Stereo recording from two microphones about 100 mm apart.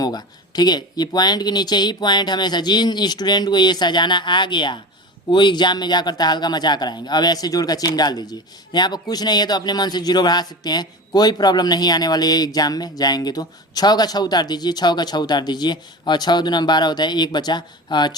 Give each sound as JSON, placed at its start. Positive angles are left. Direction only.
{"t": 0.0, "sound": "speech", "side_deg": 40}